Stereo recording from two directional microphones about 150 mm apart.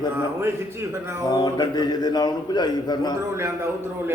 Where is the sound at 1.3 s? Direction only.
30° left (ahead or behind).